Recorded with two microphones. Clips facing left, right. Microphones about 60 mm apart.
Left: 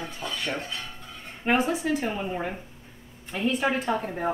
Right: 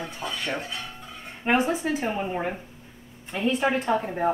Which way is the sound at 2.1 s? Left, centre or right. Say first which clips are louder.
Right 2 dB; centre.